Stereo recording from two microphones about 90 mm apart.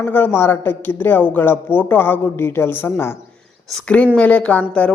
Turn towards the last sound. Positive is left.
turn(degrees=10)  # may be behind; listen again after turning